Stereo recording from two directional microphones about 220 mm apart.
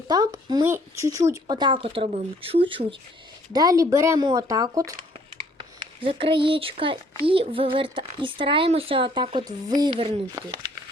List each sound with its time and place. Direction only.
0.1 s speech: 15° right (ahead or behind)